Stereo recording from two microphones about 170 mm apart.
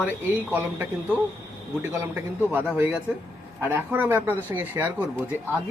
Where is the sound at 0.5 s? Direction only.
10° right (ahead or behind).